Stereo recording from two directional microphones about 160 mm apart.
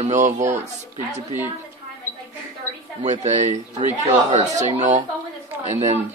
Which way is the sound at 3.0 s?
45° right (ahead or behind).